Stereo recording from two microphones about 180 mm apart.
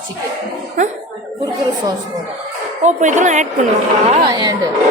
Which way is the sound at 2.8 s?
40° right (ahead or behind).